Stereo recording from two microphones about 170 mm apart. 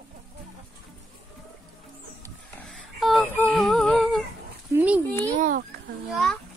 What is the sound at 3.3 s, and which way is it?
Humming, 10° left (ahead or behind).